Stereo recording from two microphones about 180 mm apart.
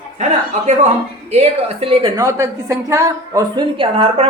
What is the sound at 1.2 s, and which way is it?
Speech, 35° right (ahead or behind).